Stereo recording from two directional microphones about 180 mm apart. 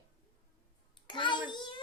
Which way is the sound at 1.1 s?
25° left (ahead or behind).